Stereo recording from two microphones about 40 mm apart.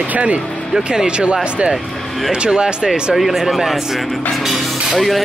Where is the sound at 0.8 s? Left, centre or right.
Right.